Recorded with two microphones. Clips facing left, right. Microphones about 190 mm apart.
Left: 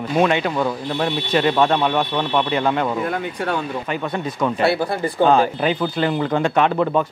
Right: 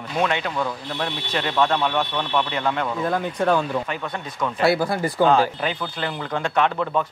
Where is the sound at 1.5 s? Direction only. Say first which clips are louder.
Left 3 dB; 25° left (ahead or behind).